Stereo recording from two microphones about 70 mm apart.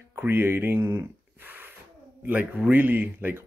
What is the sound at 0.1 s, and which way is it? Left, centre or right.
Speech, right.